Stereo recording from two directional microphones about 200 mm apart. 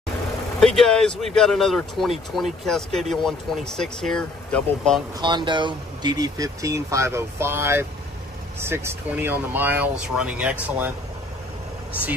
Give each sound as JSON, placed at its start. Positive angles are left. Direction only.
{"t": 0.6, "sound": "speech", "side_deg": 0}
{"t": 5.2, "sound": "speech", "side_deg": -25}